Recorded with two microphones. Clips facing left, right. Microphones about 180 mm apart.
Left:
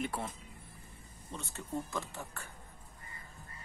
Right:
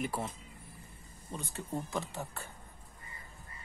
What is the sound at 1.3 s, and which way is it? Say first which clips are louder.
Speech: right 1 dB; 15° right (ahead or behind).